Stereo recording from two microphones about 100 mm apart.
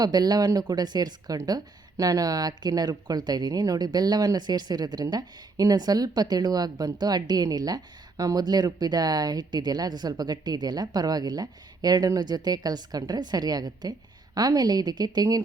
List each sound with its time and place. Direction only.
0.0 s speech: 40° right (ahead or behind)